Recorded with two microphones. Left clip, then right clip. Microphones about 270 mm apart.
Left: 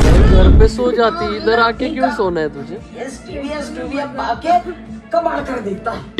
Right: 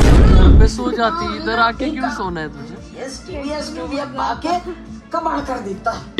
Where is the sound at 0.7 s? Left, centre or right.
Centre.